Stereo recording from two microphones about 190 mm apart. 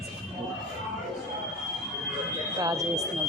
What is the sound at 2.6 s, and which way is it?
Speech, 20° right (ahead or behind).